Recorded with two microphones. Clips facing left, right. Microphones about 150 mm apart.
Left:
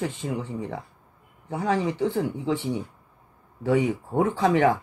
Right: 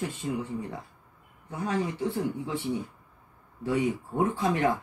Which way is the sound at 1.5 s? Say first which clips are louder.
Left 5 dB; 90° left.